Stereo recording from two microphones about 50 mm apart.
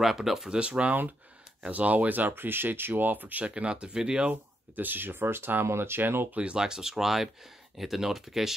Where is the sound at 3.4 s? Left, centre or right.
Right.